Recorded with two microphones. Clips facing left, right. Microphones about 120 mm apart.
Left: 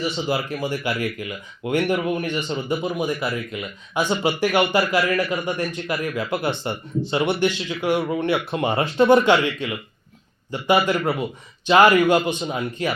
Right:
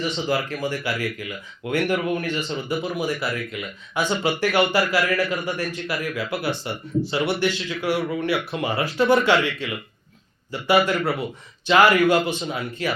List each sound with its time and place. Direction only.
0.0 s a man's voice: 15° left (ahead or behind)